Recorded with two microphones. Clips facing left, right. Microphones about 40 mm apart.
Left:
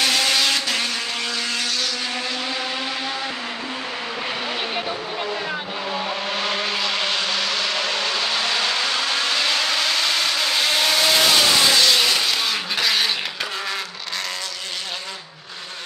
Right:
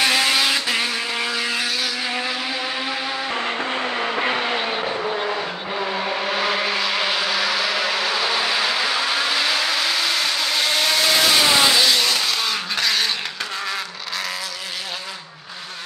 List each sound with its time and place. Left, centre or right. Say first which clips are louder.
0.0 s vehicle: right 1 dB; centre
4.0 s vehicle: right 6 dB; right
4.8 s vehicle: right 4 dB; centre
12.0 s vehicle: left 1 dB; centre